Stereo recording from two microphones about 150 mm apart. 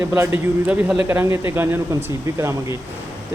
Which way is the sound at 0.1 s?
15° right (ahead or behind).